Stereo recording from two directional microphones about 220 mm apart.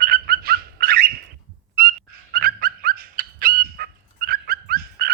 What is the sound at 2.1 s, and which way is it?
Fowl, 45° right (ahead or behind).